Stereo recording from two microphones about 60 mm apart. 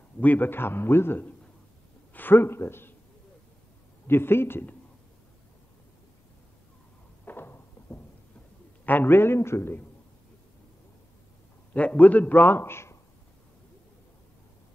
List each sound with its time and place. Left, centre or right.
0.2 s a man's voice: left
4.1 s a man's voice: left
7.2 s a sound: left
8.8 s a man's voice: left
11.7 s a man's voice: left